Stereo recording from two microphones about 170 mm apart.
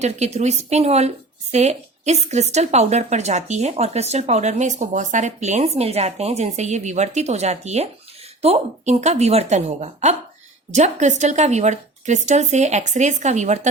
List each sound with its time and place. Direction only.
0.0 s speech: 40° right (ahead or behind)